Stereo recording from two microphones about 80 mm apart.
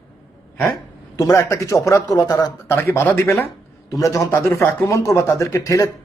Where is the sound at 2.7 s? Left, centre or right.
Left.